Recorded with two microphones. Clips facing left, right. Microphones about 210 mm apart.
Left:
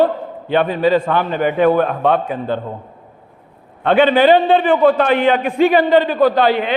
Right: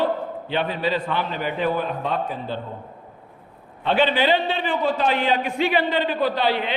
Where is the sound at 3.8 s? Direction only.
55° left (ahead or behind).